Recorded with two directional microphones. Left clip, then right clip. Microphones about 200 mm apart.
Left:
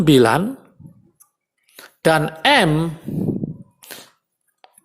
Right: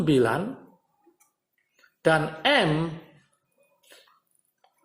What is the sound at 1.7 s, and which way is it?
A woman's voice, 35° left (ahead or behind).